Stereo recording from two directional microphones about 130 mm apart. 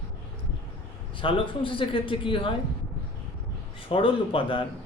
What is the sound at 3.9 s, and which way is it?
Speech, 45° left (ahead or behind).